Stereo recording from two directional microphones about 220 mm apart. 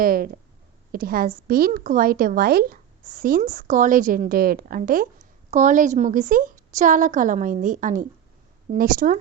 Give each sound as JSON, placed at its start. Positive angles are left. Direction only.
{"t": 0.0, "sound": "a woman's voice", "side_deg": -40}